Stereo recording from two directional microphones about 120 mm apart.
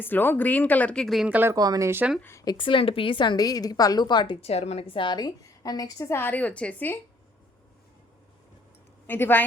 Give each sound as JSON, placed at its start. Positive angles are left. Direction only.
{"t": 0.0, "sound": "speech", "side_deg": 15}
{"t": 1.3, "sound": "speech", "side_deg": -15}
{"t": 1.5, "sound": "speech", "side_deg": -30}
{"t": 2.4, "sound": "a woman's voice", "side_deg": 40}
{"t": 4.4, "sound": "a woman's voice", "side_deg": 60}
{"t": 6.1, "sound": "speech", "side_deg": 15}
{"t": 9.0, "sound": "speech", "side_deg": 15}